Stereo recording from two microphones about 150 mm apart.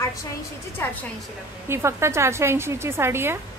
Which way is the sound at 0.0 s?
20° left (ahead or behind).